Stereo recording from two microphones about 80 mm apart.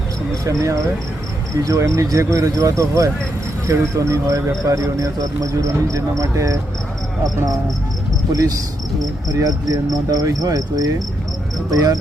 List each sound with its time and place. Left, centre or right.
0.4 s speech: right
8.3 s speech: right